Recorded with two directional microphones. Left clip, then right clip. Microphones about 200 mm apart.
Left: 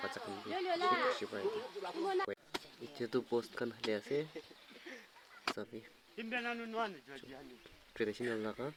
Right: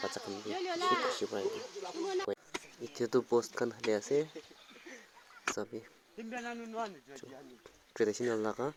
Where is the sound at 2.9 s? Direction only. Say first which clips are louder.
Right 6 dB; 5° left (ahead or behind).